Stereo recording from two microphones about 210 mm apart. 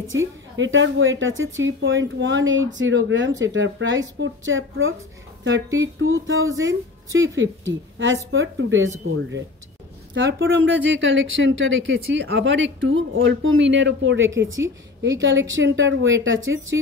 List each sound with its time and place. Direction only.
0.6 s a woman's voice: 65° right (ahead or behind)
6.5 s a woman's voice: 15° right (ahead or behind)
7.1 s speech: 65° right (ahead or behind)
10.1 s a woman's voice: 65° right (ahead or behind)